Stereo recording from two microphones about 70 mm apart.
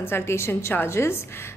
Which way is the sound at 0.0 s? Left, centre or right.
Left.